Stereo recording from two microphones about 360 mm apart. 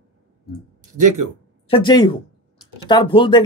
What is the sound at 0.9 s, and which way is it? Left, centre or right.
Speech, right.